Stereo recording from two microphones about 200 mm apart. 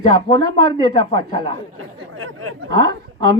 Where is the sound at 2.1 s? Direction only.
90° right.